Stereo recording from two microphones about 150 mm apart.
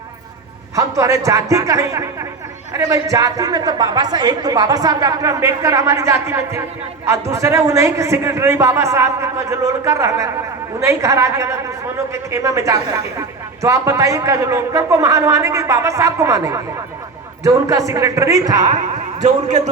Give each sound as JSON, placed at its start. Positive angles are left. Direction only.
{"t": 0.8, "sound": "a woman's voice", "side_deg": -20}
{"t": 19.2, "sound": "a man's voice", "side_deg": -50}